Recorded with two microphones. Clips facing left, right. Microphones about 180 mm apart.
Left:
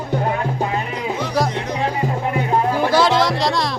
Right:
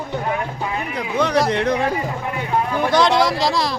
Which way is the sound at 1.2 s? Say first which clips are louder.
Right 5 dB; 65° right (ahead or behind).